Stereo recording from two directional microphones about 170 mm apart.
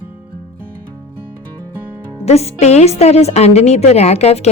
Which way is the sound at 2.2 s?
40° left (ahead or behind).